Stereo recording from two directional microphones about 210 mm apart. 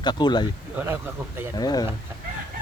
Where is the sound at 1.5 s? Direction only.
20° left (ahead or behind).